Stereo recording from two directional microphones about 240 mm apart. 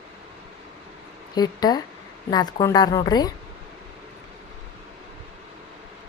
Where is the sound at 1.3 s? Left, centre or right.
Centre.